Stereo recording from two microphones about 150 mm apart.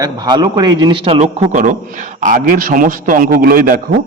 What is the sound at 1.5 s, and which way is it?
A man's voice, 55° right (ahead or behind).